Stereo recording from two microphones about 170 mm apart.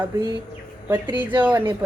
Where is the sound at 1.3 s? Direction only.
10° right (ahead or behind).